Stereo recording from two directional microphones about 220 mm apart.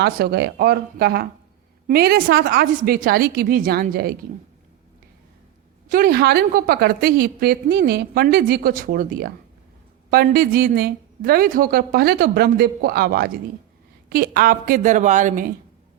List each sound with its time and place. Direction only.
0.0 s speech: 45° right (ahead or behind)
5.9 s speech: 45° right (ahead or behind)
10.1 s a woman's voice: 45° right (ahead or behind)